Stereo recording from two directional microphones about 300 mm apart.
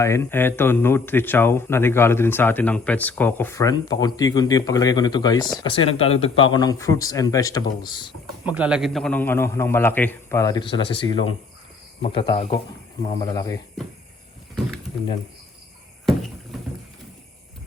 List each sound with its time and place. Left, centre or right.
0.0 s speech: centre
8.4 s speech: centre